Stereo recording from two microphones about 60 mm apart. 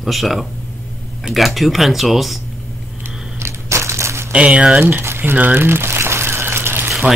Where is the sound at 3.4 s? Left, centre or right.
Right.